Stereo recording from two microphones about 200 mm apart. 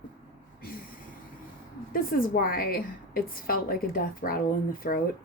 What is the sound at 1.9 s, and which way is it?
A woman's voice, 45° left (ahead or behind).